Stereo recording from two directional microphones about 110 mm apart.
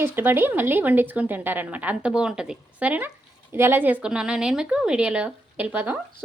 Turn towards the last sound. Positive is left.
turn(degrees=-15)  # may be behind; listen again after turning